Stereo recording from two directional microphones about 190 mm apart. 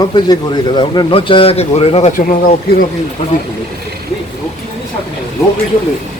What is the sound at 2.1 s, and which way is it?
Speech, 45° left (ahead or behind).